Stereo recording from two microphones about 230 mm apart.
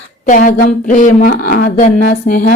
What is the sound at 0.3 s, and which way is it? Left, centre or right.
Speech, left.